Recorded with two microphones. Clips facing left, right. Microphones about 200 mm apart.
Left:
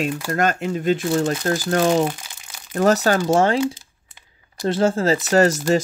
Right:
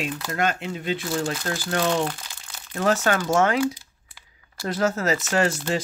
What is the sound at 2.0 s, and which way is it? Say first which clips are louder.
Crumpling: left 5 dB; 15° left (ahead or behind).